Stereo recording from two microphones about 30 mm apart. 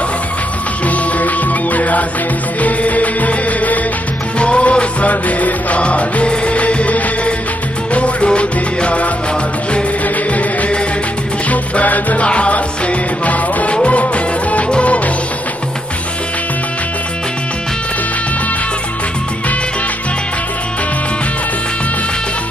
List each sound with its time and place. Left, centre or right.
0.8 s music: left
4.4 s music: left
5.1 s music: left
5.8 s music: left
12.3 s music: left